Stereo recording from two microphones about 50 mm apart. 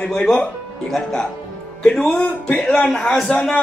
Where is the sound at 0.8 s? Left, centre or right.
Centre.